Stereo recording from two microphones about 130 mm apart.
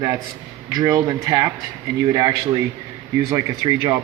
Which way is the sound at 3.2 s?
30° right (ahead or behind).